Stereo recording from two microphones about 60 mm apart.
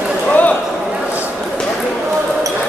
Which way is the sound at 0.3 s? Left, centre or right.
Left.